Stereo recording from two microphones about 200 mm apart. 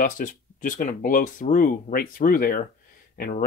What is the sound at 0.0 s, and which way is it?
Speech, 40° left (ahead or behind).